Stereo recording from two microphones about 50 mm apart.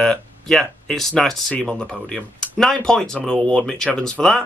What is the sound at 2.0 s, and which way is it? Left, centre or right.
Speech, centre.